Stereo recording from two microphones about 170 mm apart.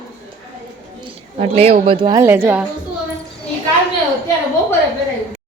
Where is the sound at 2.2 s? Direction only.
15° right (ahead or behind).